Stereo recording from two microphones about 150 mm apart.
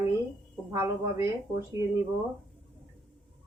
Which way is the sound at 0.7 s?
20° right (ahead or behind).